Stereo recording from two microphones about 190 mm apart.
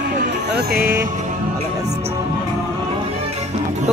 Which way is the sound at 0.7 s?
50° right (ahead or behind).